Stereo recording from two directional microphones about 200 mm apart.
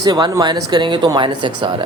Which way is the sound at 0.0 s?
20° right (ahead or behind).